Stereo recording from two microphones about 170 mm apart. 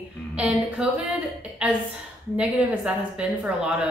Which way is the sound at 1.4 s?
5° right (ahead or behind).